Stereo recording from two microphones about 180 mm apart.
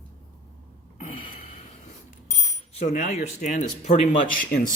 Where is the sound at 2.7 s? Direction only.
45° left (ahead or behind).